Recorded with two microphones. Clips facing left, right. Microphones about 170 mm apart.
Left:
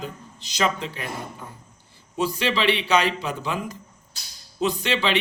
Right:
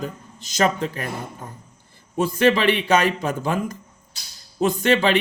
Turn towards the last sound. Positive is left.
turn(degrees=-50)  # may be behind; listen again after turning